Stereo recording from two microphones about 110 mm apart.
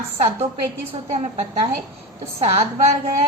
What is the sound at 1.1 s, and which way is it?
Speech, 90° right.